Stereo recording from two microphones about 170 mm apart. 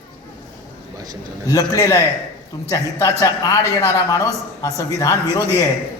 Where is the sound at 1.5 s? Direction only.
20° left (ahead or behind).